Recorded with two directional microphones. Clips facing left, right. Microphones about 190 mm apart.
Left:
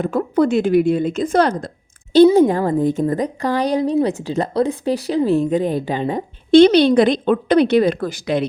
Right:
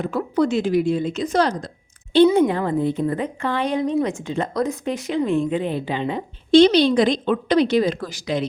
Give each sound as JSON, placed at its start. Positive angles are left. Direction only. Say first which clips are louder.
{"t": 0.0, "sound": "a woman's voice", "louder": "left 4 dB", "side_deg": 50}
{"t": 2.1, "sound": "a woman's voice", "louder": "left 4 dB", "side_deg": 35}